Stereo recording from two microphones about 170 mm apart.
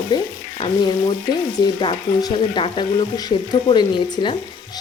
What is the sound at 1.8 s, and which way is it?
Speech, 30° left (ahead or behind).